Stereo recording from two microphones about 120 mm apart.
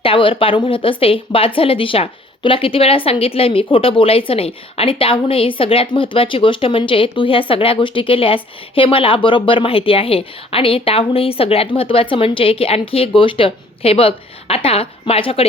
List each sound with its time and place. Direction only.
0.0 s speech: 45° left (ahead or behind)